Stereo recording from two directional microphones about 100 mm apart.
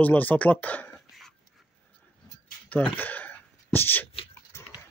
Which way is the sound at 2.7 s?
15° left (ahead or behind).